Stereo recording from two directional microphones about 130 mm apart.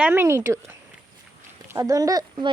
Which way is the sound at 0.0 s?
15° right (ahead or behind).